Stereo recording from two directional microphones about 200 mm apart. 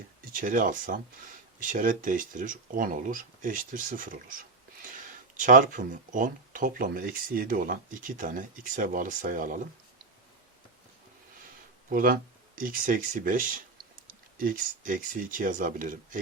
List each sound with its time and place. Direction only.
0.3 s speech: 40° right (ahead or behind)
11.9 s speech: 45° right (ahead or behind)